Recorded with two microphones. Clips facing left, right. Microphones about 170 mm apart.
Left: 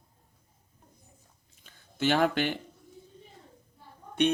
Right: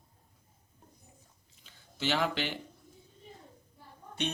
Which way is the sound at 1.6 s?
50° left (ahead or behind).